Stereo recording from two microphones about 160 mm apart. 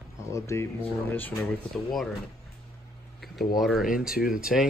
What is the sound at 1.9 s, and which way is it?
Speech, centre (ahead or behind).